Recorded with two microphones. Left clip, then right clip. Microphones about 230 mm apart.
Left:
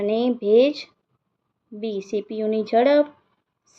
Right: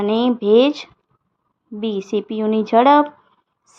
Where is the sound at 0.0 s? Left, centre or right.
Right.